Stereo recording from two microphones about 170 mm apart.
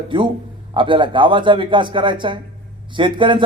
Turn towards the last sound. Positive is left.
turn(degrees=-30)  # may be behind; listen again after turning